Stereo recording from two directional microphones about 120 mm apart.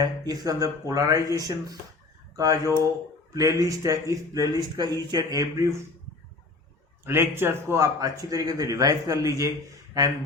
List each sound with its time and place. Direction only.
0.0 s speech: 30° right (ahead or behind)
7.0 s speech: 20° right (ahead or behind)